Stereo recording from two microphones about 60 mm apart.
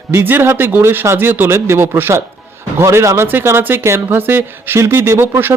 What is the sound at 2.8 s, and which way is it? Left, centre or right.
Speech, right.